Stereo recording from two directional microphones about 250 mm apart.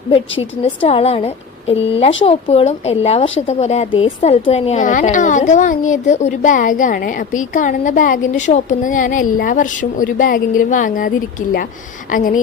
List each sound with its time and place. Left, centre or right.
0.1 s a woman's voice: left